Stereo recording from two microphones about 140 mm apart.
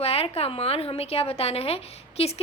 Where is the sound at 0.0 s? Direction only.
45° left (ahead or behind).